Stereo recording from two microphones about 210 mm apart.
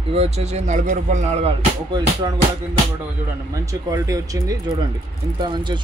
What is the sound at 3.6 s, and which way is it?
Speech, 15° right (ahead or behind).